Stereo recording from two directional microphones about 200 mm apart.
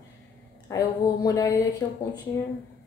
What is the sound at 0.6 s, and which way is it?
Speech, 15° left (ahead or behind).